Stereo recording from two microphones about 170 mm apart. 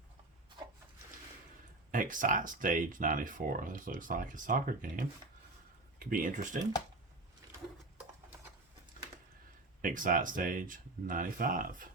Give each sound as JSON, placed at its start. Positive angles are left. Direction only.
{"t": 1.9, "sound": "speech", "side_deg": -50}
{"t": 9.8, "sound": "speech", "side_deg": -50}